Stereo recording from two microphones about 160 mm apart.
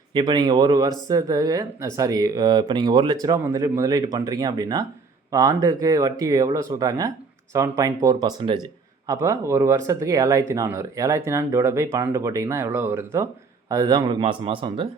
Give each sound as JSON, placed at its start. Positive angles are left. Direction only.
{"t": 0.1, "sound": "speech", "side_deg": -30}
{"t": 14.1, "sound": "speech", "side_deg": -35}